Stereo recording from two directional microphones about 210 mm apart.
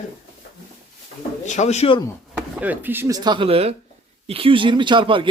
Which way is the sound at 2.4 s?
10° right (ahead or behind).